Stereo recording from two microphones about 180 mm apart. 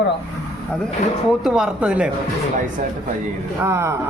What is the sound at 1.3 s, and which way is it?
Speech, centre (ahead or behind).